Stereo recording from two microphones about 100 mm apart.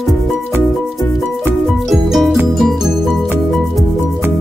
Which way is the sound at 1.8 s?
Centre (ahead or behind).